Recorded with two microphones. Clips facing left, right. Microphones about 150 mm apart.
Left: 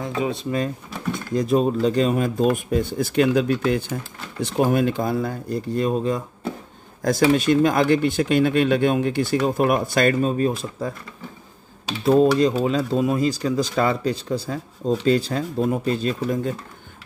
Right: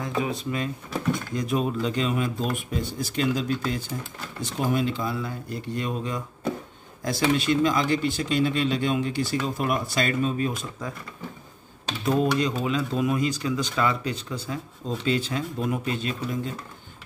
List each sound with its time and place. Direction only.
0.2 s speech: 25° left (ahead or behind)
7.1 s speech: 50° left (ahead or behind)
12.1 s speech: 35° left (ahead or behind)